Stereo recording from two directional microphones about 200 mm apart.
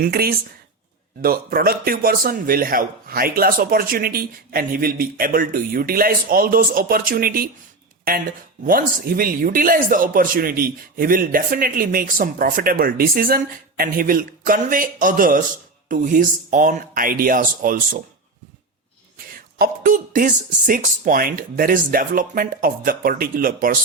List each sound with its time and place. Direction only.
0.0 s speech: 50° right (ahead or behind)
19.5 s speech: 45° right (ahead or behind)